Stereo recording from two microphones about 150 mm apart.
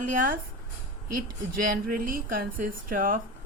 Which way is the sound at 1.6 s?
70° right (ahead or behind).